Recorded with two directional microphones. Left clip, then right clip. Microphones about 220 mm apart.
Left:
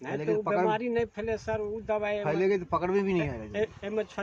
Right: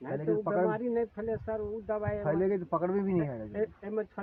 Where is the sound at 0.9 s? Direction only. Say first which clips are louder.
Left 2 dB; 25° left (ahead or behind).